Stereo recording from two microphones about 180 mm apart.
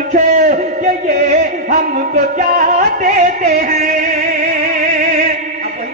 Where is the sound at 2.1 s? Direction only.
55° right (ahead or behind).